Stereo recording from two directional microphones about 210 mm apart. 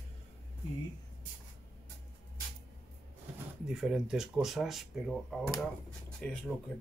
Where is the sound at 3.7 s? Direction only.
5° right (ahead or behind).